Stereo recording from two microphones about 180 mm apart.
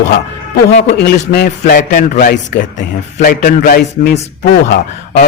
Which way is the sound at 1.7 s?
60° left (ahead or behind).